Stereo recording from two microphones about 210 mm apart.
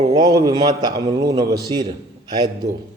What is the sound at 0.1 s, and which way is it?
A man's voice, 15° right (ahead or behind).